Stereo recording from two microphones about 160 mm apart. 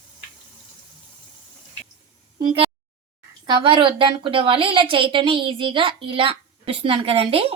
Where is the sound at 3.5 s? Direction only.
30° right (ahead or behind).